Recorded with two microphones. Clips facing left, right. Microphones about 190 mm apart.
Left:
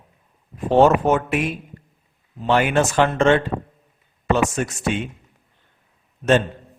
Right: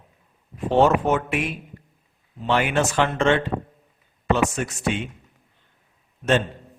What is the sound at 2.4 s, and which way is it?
A man's voice, 45° left (ahead or behind).